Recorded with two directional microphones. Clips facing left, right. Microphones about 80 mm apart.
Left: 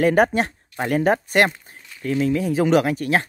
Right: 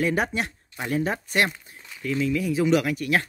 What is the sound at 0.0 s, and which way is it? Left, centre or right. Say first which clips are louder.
Speech: left 8 dB; left.